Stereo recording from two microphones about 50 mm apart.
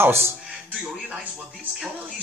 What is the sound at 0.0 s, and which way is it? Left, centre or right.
Speech, right.